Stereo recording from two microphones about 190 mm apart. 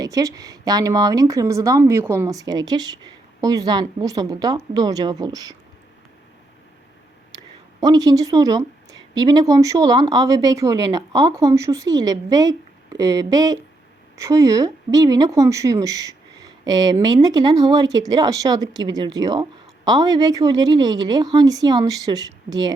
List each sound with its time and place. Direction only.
0.0 s speech: 20° right (ahead or behind)
7.8 s speech: 20° right (ahead or behind)